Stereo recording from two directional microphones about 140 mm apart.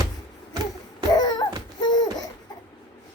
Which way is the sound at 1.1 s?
30° left (ahead or behind).